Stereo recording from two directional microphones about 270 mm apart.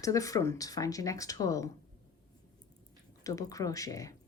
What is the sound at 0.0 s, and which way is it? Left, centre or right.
Speech, centre.